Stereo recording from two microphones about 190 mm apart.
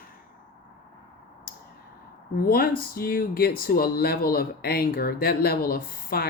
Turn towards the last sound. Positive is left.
turn(degrees=50)  # may be behind; listen again after turning